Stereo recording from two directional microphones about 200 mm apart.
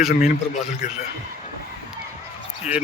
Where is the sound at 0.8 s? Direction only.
35° left (ahead or behind).